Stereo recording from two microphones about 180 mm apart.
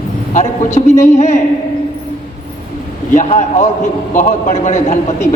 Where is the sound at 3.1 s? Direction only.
40° left (ahead or behind).